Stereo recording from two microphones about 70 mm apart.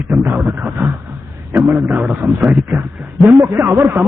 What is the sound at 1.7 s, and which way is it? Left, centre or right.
Speech, right.